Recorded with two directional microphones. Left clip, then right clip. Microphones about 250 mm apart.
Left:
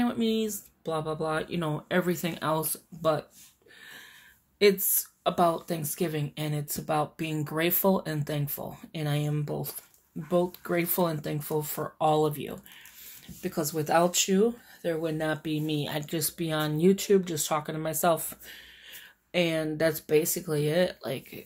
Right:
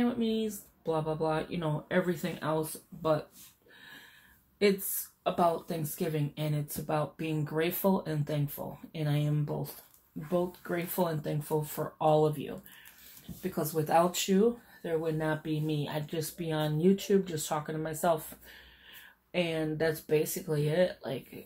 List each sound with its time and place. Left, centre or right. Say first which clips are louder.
0.0 s speech: left 3 dB; left
5.2 s speech: left 3 dB; left